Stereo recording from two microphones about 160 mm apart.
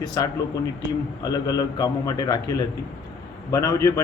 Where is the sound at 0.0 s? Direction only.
25° left (ahead or behind).